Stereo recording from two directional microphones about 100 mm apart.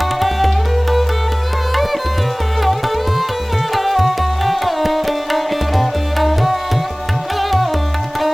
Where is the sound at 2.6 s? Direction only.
Centre (ahead or behind).